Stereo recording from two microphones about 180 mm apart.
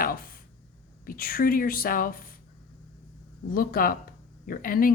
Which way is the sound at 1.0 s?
55° left (ahead or behind).